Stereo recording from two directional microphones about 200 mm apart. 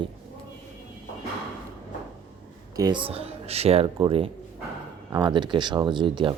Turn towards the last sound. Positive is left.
turn(degrees=-25)  # may be behind; listen again after turning